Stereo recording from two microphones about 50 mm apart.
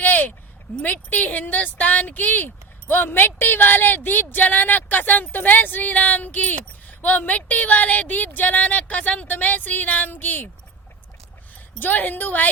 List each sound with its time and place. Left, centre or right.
0.0 s a sound: left
0.9 s speech: left
11.8 s speech: left